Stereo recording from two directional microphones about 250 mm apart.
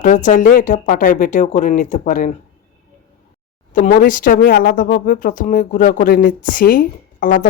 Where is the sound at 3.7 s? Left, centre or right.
Left.